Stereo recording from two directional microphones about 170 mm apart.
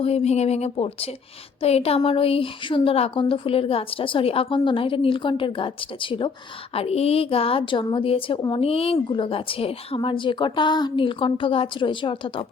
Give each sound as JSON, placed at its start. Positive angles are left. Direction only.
{"t": 0.0, "sound": "a woman's voice", "side_deg": 40}